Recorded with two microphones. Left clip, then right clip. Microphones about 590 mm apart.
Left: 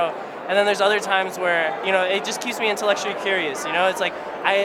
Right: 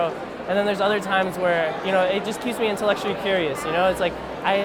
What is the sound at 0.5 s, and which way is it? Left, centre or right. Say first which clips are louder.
Speech: left 3 dB; right.